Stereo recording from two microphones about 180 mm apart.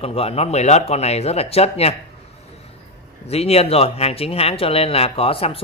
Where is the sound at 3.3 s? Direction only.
35° left (ahead or behind).